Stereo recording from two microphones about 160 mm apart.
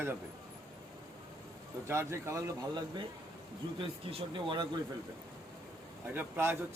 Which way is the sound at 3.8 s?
35° right (ahead or behind).